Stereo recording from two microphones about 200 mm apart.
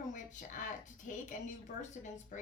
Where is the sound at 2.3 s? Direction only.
40° left (ahead or behind).